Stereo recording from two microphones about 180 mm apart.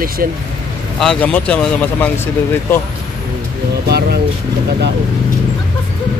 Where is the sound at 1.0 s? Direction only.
5° left (ahead or behind).